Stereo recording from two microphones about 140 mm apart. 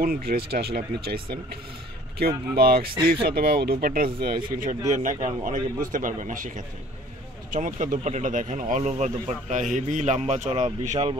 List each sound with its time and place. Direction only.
0.0 s speech: 90° right
4.9 s a man's voice: 65° right (ahead or behind); by 11.1 s 50° right (ahead or behind)